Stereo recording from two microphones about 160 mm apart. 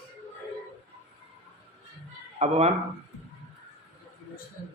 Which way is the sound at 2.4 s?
40° right (ahead or behind).